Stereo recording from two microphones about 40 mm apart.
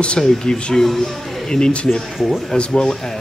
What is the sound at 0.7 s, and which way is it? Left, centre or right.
Speech, centre.